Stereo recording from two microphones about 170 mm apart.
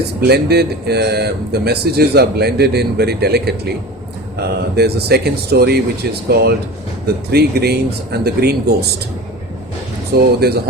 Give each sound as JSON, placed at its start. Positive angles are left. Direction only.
{"t": 0.3, "sound": "speech", "side_deg": -70}
{"t": 10.1, "sound": "speech", "side_deg": -70}